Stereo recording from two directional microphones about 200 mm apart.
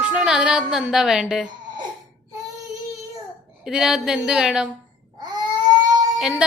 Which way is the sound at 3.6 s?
5° right (ahead or behind).